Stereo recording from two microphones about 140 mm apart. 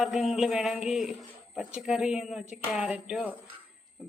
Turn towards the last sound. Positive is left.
turn(degrees=-5)  # may be behind; listen again after turning